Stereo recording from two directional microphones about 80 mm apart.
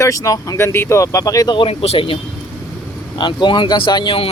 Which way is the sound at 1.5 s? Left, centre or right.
Left.